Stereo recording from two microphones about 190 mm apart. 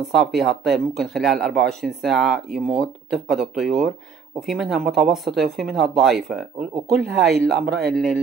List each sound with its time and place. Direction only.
0.1 s speech: centre (ahead or behind)
6.9 s speech: 60° right (ahead or behind)
7.9 s speech: centre (ahead or behind)